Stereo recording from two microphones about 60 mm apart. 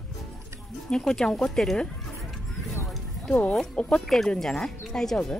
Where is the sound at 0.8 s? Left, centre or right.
Centre.